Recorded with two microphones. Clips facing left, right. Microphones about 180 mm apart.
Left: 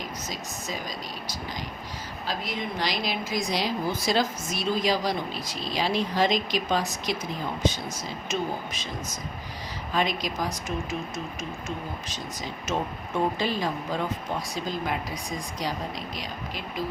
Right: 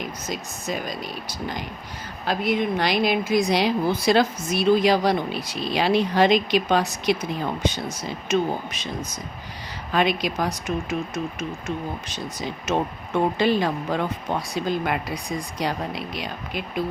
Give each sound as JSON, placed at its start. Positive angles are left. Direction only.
{"t": 0.3, "sound": "speech", "side_deg": -60}
{"t": 8.3, "sound": "speech", "side_deg": -60}
{"t": 9.9, "sound": "speech", "side_deg": -65}